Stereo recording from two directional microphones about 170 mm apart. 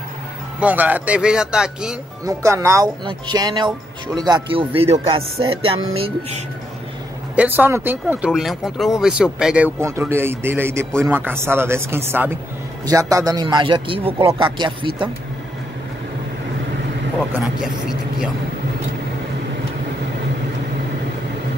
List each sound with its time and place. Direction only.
0.6 s speech: 10° right (ahead or behind)
2.2 s a man's voice: 20° right (ahead or behind); by 6.4 s 35° right (ahead or behind)
7.3 s speech: 10° right (ahead or behind)
9.8 s a man's voice: 15° right (ahead or behind)
17.3 s speech: 5° right (ahead or behind)